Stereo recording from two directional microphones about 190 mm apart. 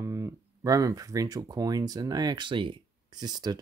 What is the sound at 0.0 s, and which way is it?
Speech, 15° right (ahead or behind).